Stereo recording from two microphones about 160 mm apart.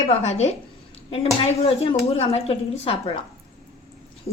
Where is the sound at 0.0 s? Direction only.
45° left (ahead or behind).